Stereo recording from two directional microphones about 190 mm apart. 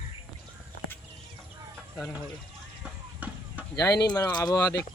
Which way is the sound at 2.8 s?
10° right (ahead or behind).